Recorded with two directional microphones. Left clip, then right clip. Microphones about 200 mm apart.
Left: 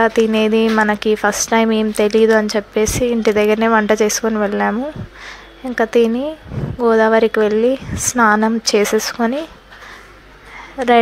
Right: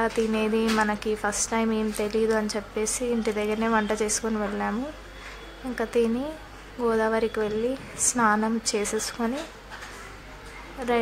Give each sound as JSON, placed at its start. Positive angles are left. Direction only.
{"t": 0.0, "sound": "a woman's voice", "side_deg": 35}